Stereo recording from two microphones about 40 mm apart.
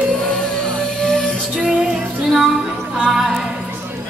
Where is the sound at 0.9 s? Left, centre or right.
Centre.